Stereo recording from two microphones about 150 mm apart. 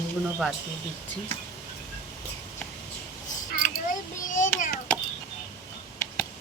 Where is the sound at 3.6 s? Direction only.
60° left (ahead or behind).